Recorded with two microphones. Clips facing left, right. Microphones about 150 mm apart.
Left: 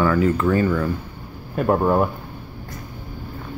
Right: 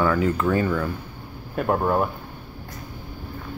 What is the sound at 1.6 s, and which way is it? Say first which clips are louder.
Speech: left 4 dB; 5° left (ahead or behind).